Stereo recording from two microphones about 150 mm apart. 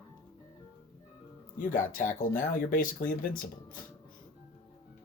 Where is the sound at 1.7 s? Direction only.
65° left (ahead or behind).